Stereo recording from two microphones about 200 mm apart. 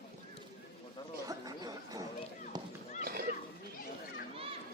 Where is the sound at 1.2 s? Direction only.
20° right (ahead or behind).